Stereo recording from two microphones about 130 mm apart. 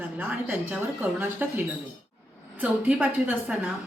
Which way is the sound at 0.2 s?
10° right (ahead or behind).